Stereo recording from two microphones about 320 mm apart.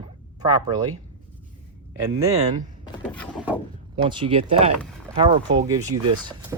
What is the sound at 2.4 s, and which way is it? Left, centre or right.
Speech, right.